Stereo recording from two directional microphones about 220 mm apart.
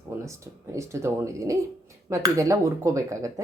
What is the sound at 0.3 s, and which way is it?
Speech, 15° right (ahead or behind).